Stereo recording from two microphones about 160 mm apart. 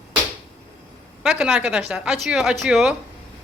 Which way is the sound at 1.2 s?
5° right (ahead or behind).